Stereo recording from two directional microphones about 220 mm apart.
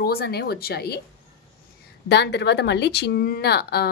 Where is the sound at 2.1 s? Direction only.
50° left (ahead or behind).